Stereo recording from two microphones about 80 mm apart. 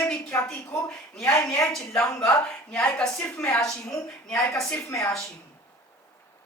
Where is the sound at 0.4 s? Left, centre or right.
Centre.